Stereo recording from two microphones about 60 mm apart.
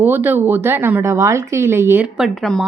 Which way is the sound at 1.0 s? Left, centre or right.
Right.